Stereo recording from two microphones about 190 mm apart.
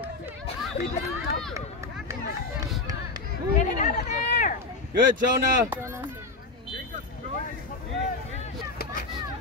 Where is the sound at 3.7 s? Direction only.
40° left (ahead or behind).